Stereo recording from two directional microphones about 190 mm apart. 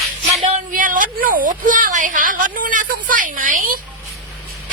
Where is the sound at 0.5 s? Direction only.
45° right (ahead or behind).